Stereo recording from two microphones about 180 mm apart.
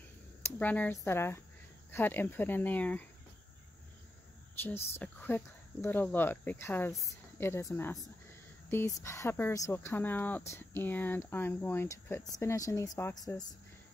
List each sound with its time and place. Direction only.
0.4 s speech: 10° left (ahead or behind)
4.6 s speech: 10° left (ahead or behind)